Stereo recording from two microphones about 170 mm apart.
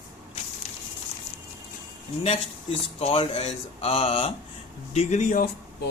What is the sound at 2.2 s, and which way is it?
Speech, 35° left (ahead or behind).